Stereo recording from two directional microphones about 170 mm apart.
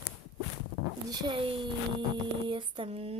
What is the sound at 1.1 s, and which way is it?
Speech, 25° right (ahead or behind).